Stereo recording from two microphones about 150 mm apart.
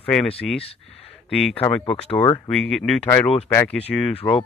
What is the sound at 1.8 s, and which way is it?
Speech, 40° left (ahead or behind).